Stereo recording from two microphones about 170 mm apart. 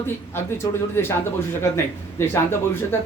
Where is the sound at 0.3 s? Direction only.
15° left (ahead or behind).